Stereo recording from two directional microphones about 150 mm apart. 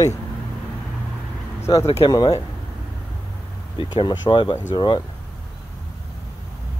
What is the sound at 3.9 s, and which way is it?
Speech, 30° left (ahead or behind).